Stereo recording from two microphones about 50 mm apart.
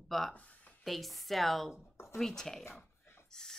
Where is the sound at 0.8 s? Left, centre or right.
Centre.